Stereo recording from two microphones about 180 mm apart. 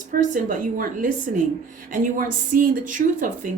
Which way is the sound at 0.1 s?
50° right (ahead or behind).